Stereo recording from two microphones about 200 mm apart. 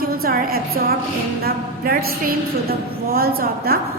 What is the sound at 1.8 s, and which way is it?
Speech, 50° right (ahead or behind).